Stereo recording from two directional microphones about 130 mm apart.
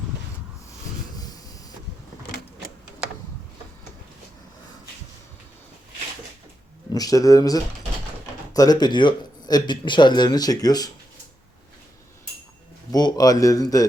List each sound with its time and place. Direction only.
1.1 s a sound: 30° left (ahead or behind)
6.9 s speech: 30° left (ahead or behind)
12.9 s speech: 30° left (ahead or behind)